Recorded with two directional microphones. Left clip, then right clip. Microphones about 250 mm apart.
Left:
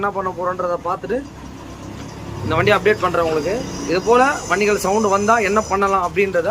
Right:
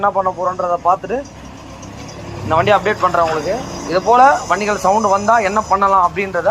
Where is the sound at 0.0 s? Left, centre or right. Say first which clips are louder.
Right 5 dB; centre.